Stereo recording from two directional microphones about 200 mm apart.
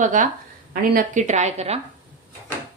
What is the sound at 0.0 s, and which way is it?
A woman's voice, 40° right (ahead or behind).